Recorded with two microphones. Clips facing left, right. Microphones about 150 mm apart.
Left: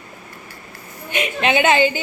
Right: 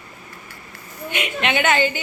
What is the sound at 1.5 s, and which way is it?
Speech, 25° left (ahead or behind).